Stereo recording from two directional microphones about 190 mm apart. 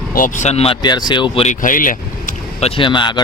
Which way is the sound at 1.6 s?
45° left (ahead or behind).